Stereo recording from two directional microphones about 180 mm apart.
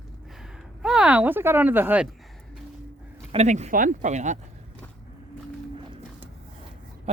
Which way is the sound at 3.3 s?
40° right (ahead or behind).